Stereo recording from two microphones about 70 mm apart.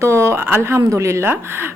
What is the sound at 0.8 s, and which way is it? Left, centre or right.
Speech, right.